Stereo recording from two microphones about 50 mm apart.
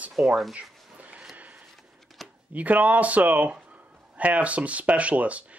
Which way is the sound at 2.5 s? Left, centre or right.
Right.